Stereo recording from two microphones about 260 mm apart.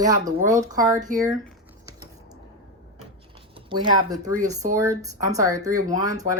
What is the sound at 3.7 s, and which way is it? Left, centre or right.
Speech, centre.